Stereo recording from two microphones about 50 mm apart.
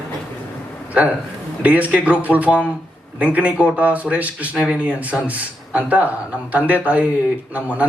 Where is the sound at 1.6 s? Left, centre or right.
Right.